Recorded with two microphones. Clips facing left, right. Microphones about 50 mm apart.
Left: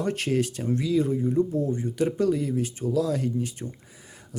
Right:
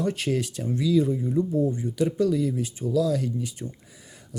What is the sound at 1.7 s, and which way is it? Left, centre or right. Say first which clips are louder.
Speech: even; left.